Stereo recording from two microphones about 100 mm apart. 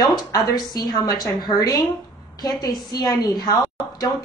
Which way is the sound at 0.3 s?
45° left (ahead or behind).